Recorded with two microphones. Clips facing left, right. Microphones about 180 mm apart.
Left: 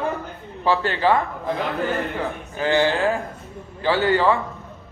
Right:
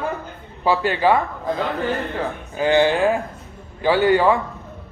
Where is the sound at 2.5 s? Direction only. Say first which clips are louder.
Right 3 dB; 15° right (ahead or behind).